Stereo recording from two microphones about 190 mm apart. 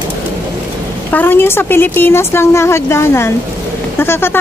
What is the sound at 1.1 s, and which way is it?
A woman's voice, 10° left (ahead or behind).